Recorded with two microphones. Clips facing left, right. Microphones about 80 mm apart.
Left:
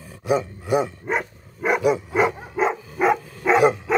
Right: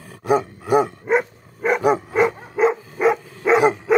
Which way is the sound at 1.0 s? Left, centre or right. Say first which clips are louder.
Right 6 dB; centre.